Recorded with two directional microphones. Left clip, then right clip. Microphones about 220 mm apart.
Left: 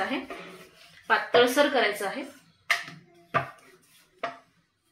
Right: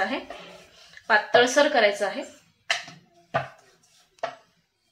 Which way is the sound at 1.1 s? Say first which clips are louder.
Right 2 dB; 45° right (ahead or behind).